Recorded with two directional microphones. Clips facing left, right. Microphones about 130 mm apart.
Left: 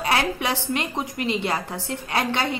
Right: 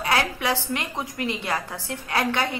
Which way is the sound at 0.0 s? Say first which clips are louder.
Left 1 dB; 25° left (ahead or behind).